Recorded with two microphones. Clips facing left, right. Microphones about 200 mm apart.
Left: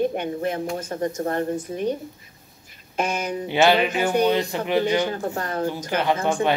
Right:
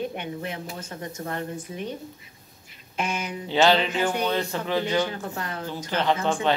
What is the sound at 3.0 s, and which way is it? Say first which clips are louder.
Speech: left 5 dB; 40° left (ahead or behind).